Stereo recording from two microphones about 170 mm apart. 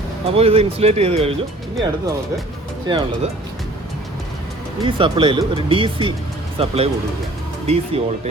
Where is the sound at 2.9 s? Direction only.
25° right (ahead or behind).